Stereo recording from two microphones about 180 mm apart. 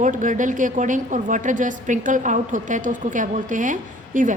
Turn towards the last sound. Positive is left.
turn(degrees=-45)  # may be behind; listen again after turning